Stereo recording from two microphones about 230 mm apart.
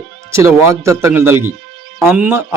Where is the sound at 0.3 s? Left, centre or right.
Centre.